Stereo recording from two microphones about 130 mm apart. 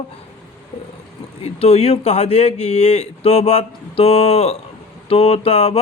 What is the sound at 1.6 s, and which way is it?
A man's voice, 55° left (ahead or behind).